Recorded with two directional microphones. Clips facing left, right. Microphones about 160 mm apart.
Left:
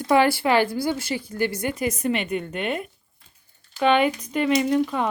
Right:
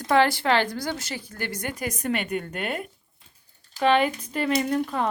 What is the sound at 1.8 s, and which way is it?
Speech, 40° right (ahead or behind).